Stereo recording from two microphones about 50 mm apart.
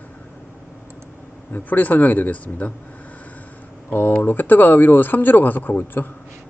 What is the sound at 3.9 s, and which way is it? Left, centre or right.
Speech, left.